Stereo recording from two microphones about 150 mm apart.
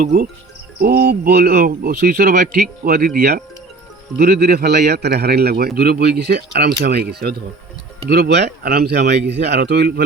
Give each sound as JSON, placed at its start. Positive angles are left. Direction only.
{"t": 0.0, "sound": "speech", "side_deg": -65}
{"t": 0.8, "sound": "speech", "side_deg": -90}
{"t": 4.2, "sound": "a man's voice", "side_deg": -90}